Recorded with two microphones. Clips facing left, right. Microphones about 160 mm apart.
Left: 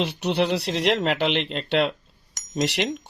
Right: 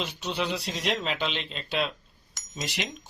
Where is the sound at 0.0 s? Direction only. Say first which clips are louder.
Left 8 dB; 70° left (ahead or behind).